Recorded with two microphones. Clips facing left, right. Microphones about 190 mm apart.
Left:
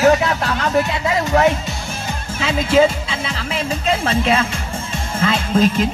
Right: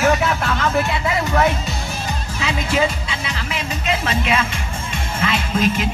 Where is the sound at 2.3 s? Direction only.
25° left (ahead or behind).